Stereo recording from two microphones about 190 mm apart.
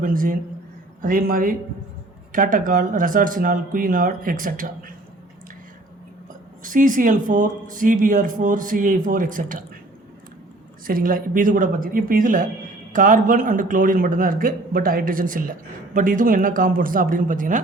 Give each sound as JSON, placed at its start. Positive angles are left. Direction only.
{"t": 0.0, "sound": "speech", "side_deg": -45}
{"t": 6.6, "sound": "speech", "side_deg": -45}
{"t": 10.8, "sound": "speech", "side_deg": -45}